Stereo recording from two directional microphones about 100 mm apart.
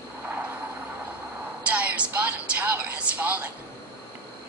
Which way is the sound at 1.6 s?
15° right (ahead or behind).